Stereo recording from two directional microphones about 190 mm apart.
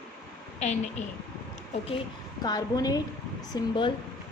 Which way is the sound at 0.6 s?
40° left (ahead or behind).